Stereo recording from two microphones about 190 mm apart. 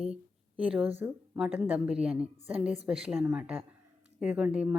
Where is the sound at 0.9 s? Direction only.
10° right (ahead or behind).